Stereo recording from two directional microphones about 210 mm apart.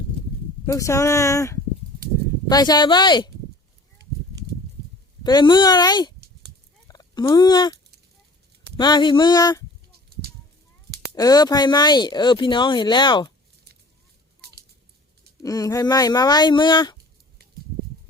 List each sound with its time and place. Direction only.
0.6 s speech: 15° left (ahead or behind)
5.2 s speech: 20° left (ahead or behind)
6.8 s turkey: 15° left (ahead or behind)
8.8 s speech: 20° left (ahead or behind)
11.1 s speech: 20° left (ahead or behind)
15.4 s speech: 15° left (ahead or behind)